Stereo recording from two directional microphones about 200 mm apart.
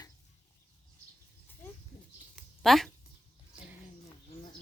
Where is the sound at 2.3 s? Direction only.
Centre (ahead or behind).